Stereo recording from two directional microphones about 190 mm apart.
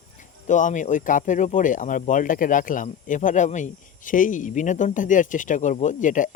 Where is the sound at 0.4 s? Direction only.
40° left (ahead or behind).